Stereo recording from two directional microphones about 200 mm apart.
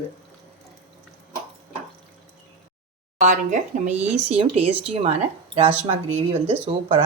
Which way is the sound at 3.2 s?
40° right (ahead or behind).